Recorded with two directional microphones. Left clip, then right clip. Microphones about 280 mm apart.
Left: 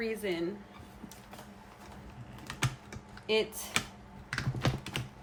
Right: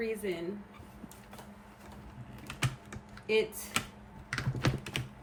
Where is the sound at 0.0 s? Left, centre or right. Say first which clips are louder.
Even; centre.